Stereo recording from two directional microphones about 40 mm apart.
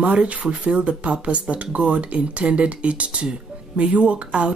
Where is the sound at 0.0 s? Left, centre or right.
Right.